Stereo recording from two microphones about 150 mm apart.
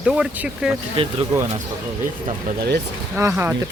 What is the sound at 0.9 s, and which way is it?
Speech, 35° right (ahead or behind).